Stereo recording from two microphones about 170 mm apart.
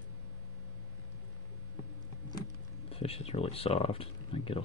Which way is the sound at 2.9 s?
35° left (ahead or behind).